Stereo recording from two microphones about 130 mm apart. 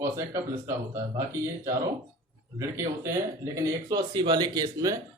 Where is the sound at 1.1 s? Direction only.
25° right (ahead or behind).